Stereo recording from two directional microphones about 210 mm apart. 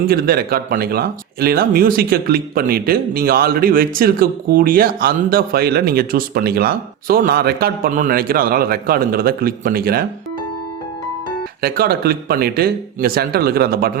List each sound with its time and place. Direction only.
0.1 s speech: 45° right (ahead or behind)
11.6 s speech: 45° right (ahead or behind)